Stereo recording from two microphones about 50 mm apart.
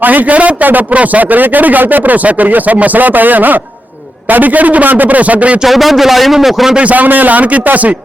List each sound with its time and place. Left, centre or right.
0.0 s a man's voice: right
5.6 s speech: centre
6.7 s a man's voice: right